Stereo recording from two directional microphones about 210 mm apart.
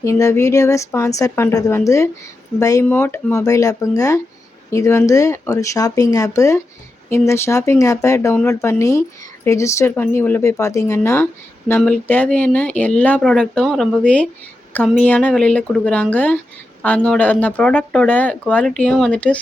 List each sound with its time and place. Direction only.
0.0 s speech: 15° left (ahead or behind)